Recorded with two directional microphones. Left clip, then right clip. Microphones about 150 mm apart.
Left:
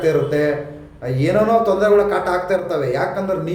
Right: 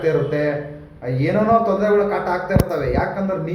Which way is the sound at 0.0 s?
20° left (ahead or behind).